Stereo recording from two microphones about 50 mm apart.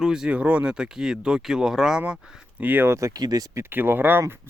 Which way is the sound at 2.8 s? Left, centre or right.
Right.